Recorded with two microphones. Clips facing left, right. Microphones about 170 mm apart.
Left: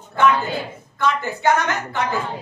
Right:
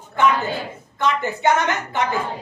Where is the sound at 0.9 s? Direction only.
20° right (ahead or behind).